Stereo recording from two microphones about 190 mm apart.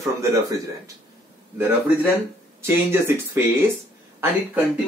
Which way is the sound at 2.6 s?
15° right (ahead or behind).